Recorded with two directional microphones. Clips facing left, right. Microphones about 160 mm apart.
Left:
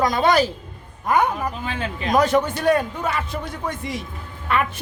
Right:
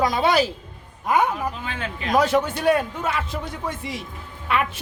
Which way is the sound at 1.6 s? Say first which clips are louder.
Left 3 dB; 35° left (ahead or behind).